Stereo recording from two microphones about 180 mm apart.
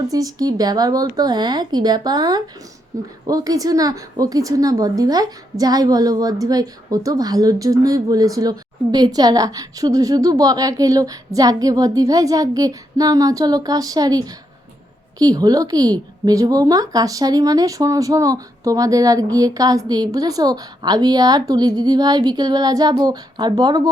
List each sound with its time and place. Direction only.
0.1 s a woman's voice: 20° right (ahead or behind)